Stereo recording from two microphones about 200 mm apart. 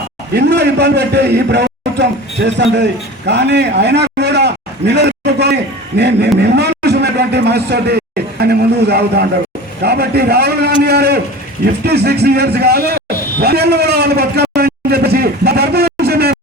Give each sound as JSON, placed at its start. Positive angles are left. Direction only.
{"t": 0.3, "sound": "a man's voice", "side_deg": -60}